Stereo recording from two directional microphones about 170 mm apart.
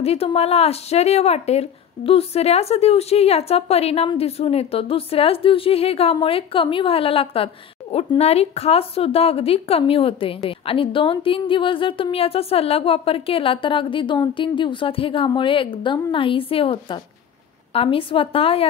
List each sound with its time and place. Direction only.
0.0 s a woman's voice: 35° left (ahead or behind)